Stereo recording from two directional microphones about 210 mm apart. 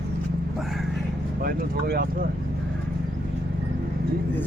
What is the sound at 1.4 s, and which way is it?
Speech, 50° right (ahead or behind).